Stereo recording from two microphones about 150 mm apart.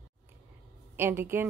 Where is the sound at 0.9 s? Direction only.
15° right (ahead or behind).